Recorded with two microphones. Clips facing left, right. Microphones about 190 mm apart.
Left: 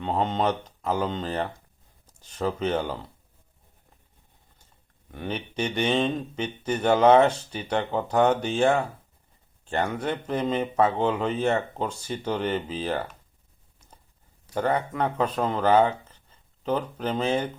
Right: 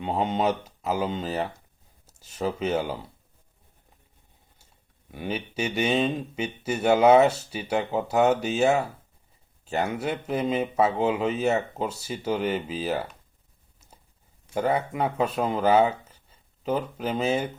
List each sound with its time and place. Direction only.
0.0 s speech: 10° right (ahead or behind)
5.1 s speech: 10° right (ahead or behind)
14.5 s speech: 10° right (ahead or behind)